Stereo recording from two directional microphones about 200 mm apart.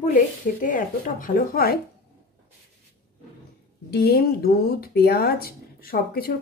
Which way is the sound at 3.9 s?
50° left (ahead or behind).